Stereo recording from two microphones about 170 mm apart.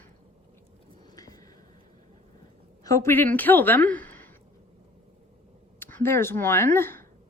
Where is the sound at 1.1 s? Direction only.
20° left (ahead or behind).